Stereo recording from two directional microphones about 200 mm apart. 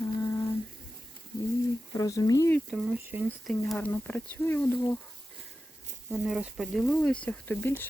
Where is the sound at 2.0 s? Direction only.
15° left (ahead or behind).